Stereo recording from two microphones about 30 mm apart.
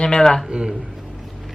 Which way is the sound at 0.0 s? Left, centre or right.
Left.